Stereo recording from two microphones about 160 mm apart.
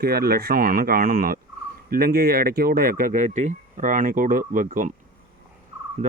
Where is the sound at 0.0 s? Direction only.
70° right (ahead or behind).